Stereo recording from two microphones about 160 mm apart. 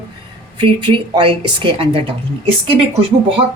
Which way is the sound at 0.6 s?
30° right (ahead or behind).